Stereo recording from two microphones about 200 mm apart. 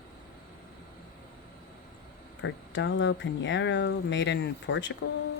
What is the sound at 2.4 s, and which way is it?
Speech, 70° left (ahead or behind).